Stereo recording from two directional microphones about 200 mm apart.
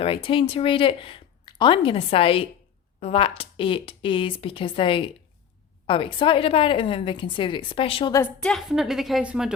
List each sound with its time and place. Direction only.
0.0 s speech: 25° left (ahead or behind)
8.2 s a woman's voice: 5° left (ahead or behind)